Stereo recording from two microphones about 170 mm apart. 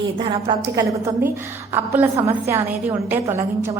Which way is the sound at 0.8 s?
15° right (ahead or behind).